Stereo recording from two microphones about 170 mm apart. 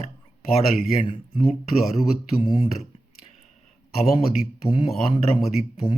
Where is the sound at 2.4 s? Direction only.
30° left (ahead or behind).